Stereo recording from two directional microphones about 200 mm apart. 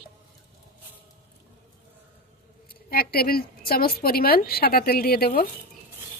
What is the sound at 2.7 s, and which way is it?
Speech, 50° left (ahead or behind).